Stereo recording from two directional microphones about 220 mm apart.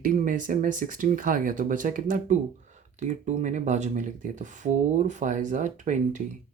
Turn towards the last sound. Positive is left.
turn(degrees=-35)  # may be behind; listen again after turning